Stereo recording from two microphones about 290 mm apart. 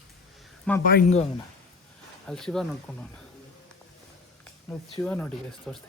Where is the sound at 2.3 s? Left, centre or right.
Centre.